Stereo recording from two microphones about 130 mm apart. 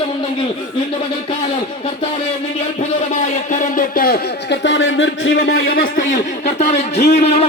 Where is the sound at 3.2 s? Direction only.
75° left (ahead or behind).